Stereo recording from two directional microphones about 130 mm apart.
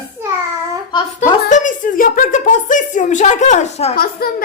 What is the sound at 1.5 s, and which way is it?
A woman's voice, 80° left.